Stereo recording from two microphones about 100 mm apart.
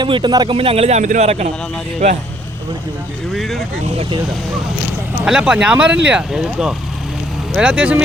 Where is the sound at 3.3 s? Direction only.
Centre (ahead or behind).